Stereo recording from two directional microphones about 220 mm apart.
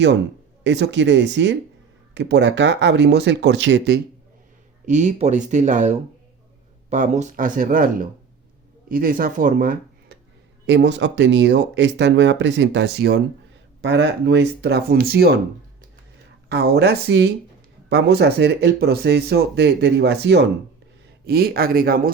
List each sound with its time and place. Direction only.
0.6 s speech: 55° right (ahead or behind)
4.9 s speech: 35° right (ahead or behind)
10.7 s speech: 55° right (ahead or behind)
16.5 s speech: 50° right (ahead or behind)